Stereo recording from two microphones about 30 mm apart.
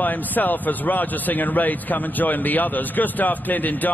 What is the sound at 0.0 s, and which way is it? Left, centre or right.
Speech, left.